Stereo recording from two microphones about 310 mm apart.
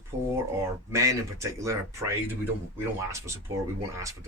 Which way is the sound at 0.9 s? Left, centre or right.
Centre.